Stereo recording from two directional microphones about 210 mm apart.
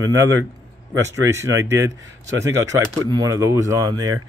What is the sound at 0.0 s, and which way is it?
Speech, 15° right (ahead or behind).